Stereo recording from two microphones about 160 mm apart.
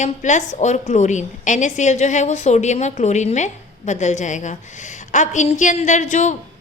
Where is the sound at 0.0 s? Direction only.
50° left (ahead or behind).